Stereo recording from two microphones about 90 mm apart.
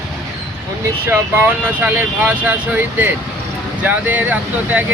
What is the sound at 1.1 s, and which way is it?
Speech, 25° right (ahead or behind).